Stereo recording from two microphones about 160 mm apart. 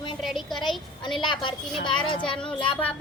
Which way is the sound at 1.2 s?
30° left (ahead or behind).